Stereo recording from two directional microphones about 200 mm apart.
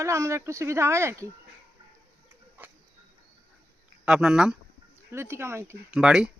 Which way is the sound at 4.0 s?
5° right (ahead or behind).